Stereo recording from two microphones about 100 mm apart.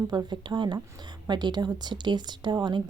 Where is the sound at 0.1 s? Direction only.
45° right (ahead or behind).